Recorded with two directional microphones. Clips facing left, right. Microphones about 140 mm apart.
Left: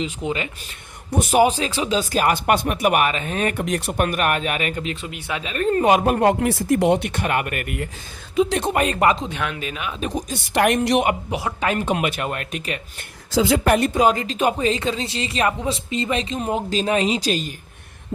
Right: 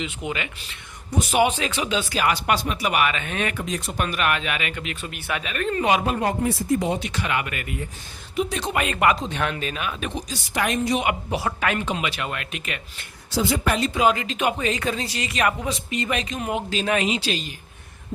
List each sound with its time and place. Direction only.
0.0 s speech: 35° left (ahead or behind)
1.1 s speech: 50° left (ahead or behind)
3.5 s speech: 60° left (ahead or behind); by 4.9 s 35° left (ahead or behind)
4.9 s speech: 20° left (ahead or behind); by 8.8 s 50° left (ahead or behind)
8.8 s speech: 35° left (ahead or behind)
9.2 s speech: 10° left (ahead or behind)
10.0 s speech: 35° left (ahead or behind)
10.2 s speech: 60° left (ahead or behind)
11.3 s speech: 15° left (ahead or behind)
11.6 s speech: 35° left (ahead or behind)
11.9 s speech: 50° left (ahead or behind)
13.3 s a woman's voice: 90° left
13.7 s speech: 50° left (ahead or behind)